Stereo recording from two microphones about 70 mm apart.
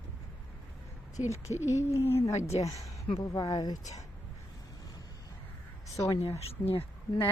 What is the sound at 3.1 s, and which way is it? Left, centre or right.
Speech, left.